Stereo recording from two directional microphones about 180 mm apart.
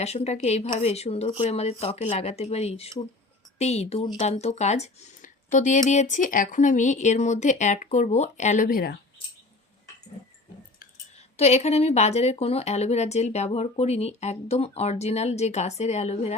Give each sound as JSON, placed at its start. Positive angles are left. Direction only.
{"t": 0.0, "sound": "speech", "side_deg": 35}
{"t": 11.3, "sound": "speech", "side_deg": 35}